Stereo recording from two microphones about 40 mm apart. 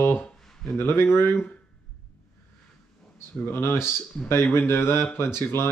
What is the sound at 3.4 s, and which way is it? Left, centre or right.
Speech, left.